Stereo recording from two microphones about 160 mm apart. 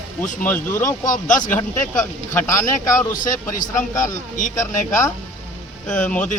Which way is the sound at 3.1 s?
55° left (ahead or behind).